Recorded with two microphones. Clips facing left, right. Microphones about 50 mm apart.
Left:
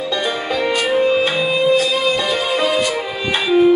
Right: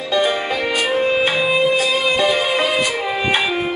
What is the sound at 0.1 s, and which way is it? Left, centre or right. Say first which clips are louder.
Music: right 5 dB; centre.